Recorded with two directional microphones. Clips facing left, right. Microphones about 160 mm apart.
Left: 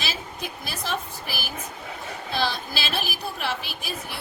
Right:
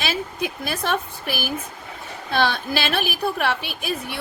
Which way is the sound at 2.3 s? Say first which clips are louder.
Right 6 dB; 60° right (ahead or behind).